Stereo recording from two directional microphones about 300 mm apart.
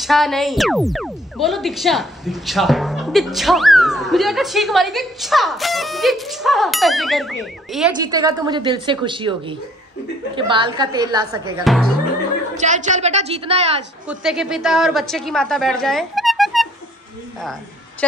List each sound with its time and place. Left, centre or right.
0.0 s a woman's voice: centre
8.0 s a woman's voice: centre
11.6 s a woman's voice: centre
12.5 s a woman's voice: right
14.0 s a woman's voice: centre